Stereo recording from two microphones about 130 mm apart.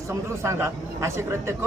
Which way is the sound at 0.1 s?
20° right (ahead or behind).